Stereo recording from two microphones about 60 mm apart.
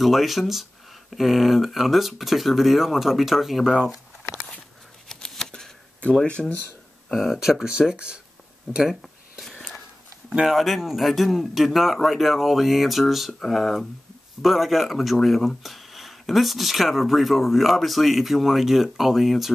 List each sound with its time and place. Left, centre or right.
0.0 s speech: centre
5.0 s a sound: centre
6.4 s speech: centre
7.3 s speech: centre
8.7 s speech: centre
9.0 s a sound: centre
10.4 s speech: centre